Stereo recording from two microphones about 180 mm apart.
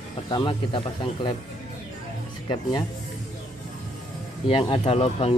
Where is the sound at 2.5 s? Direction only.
25° left (ahead or behind).